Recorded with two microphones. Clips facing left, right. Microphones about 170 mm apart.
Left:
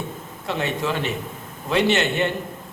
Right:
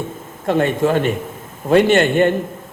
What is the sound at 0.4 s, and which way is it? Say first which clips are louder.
Speech: right 9 dB; 50° right (ahead or behind).